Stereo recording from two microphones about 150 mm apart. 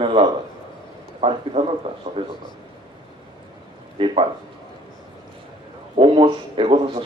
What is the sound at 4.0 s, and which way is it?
Speech, 35° right (ahead or behind).